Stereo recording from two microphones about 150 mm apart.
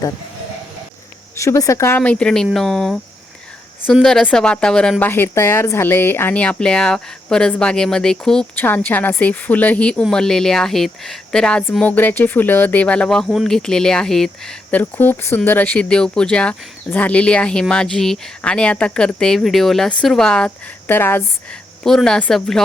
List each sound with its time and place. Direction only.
1.4 s speech: 20° left (ahead or behind)
2.0 s speech: 5° left (ahead or behind)
4.0 s a woman's voice: 5° left (ahead or behind)
21.8 s speech: 5° left (ahead or behind)